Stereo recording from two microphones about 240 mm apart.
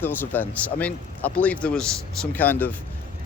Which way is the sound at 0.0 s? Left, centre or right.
Centre.